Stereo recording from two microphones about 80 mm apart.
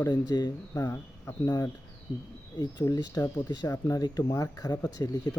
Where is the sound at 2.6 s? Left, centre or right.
Left.